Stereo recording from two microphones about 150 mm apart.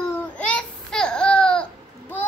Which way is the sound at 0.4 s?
5° left (ahead or behind).